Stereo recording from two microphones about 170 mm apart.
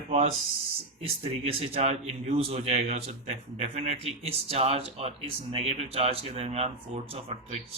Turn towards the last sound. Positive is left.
turn(degrees=-40)  # may be behind; listen again after turning